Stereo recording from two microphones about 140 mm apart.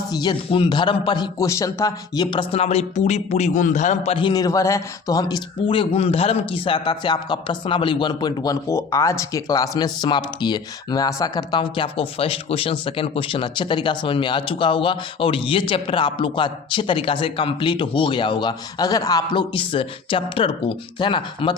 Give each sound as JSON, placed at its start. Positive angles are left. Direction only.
{"t": 0.1, "sound": "speech", "side_deg": 30}
{"t": 4.1, "sound": "speech", "side_deg": 35}